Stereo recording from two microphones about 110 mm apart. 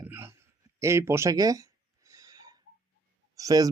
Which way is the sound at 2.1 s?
30° right (ahead or behind).